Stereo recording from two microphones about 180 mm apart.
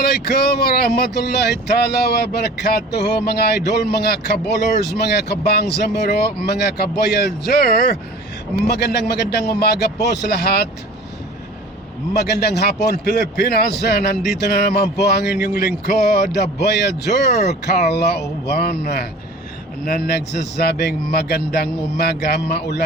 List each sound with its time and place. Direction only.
0.0 s speech: 60° left (ahead or behind)
12.1 s speech: 65° left (ahead or behind)